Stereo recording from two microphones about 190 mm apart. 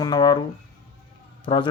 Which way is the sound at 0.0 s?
20° left (ahead or behind).